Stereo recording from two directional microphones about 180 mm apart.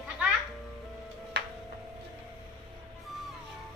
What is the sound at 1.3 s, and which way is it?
Music, 70° right (ahead or behind).